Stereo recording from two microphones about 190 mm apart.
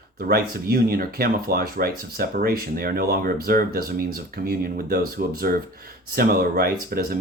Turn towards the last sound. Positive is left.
turn(degrees=-50)  # may be behind; listen again after turning